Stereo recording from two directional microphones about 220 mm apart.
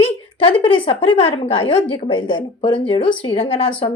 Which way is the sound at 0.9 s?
25° left (ahead or behind).